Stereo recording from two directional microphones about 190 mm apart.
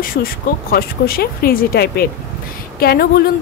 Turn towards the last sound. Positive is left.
turn(degrees=55)  # may be behind; listen again after turning